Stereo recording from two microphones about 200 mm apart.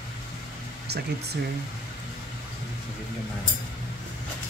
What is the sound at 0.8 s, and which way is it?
Speech, 55° right (ahead or behind).